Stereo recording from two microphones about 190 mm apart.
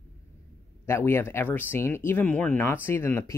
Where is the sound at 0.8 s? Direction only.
15° left (ahead or behind).